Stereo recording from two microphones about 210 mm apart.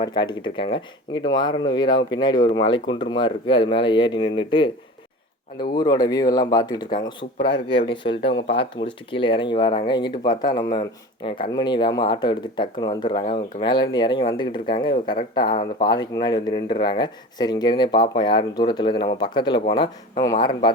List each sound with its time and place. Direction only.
0.0 s speech: 20° left (ahead or behind)